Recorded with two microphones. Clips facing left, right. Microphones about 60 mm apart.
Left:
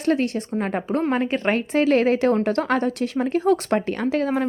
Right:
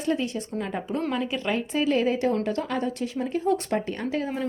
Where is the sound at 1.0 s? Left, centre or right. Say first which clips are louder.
Left 6 dB; left.